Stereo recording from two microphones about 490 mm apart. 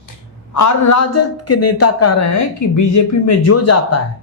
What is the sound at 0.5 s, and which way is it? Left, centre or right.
A man's voice, left.